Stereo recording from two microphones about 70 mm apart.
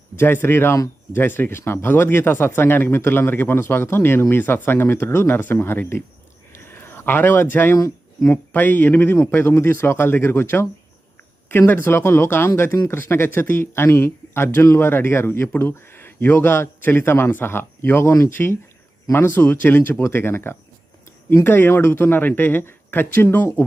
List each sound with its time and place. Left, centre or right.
0.2 s speech: left
6.5 s a sound: left
7.8 s speech: left
8.5 s speech: left